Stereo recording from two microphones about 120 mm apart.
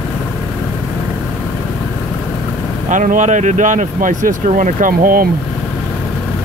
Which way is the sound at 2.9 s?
90° right.